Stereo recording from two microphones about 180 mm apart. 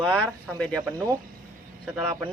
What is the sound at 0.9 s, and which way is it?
Speech, 20° right (ahead or behind).